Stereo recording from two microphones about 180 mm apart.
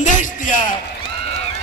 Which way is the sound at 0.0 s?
45° left (ahead or behind).